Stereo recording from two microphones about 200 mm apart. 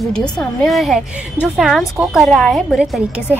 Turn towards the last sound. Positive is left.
turn(degrees=-5)  # may be behind; listen again after turning